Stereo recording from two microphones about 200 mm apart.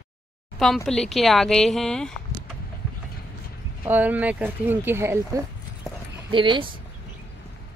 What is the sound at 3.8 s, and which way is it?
Speech, 10° right (ahead or behind).